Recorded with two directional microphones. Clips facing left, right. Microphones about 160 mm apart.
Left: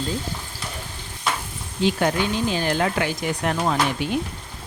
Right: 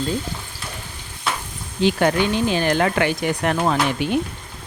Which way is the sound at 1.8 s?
70° right (ahead or behind).